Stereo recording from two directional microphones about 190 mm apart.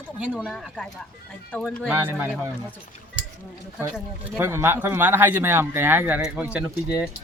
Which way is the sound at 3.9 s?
10° right (ahead or behind).